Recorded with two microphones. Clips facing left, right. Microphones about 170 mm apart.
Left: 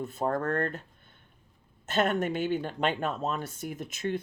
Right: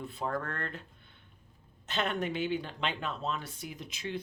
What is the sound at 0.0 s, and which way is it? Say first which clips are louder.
Speech: left 6 dB; 45° left (ahead or behind).